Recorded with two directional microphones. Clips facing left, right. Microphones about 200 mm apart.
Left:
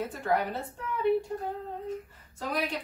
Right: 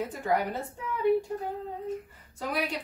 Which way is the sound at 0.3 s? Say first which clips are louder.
Even; 15° right (ahead or behind).